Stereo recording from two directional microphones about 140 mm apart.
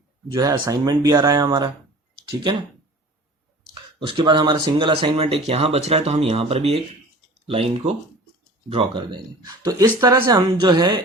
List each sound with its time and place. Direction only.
0.3 s speech: 30° right (ahead or behind)
4.0 s speech: 35° right (ahead or behind)
8.7 s a woman's voice: 35° right (ahead or behind)